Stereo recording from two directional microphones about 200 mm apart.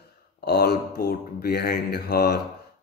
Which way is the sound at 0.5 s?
50° left (ahead or behind).